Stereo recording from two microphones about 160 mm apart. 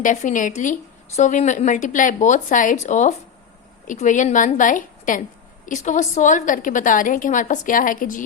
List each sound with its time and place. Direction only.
0.0 s a woman's voice: 50° left (ahead or behind)